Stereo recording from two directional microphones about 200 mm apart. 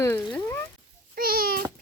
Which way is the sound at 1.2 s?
45° right (ahead or behind).